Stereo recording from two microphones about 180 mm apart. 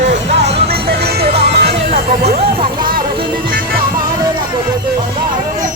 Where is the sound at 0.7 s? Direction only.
65° right (ahead or behind).